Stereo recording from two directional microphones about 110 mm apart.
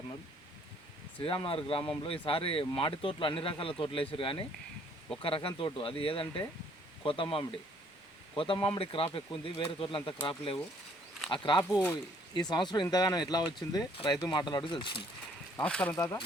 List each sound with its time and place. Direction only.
1.2 s speech: 55° left (ahead or behind)
11.3 s speech: 45° left (ahead or behind)
15.6 s speech: 10° left (ahead or behind)